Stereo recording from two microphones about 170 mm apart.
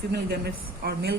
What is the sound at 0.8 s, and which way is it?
Speech, 65° right (ahead or behind).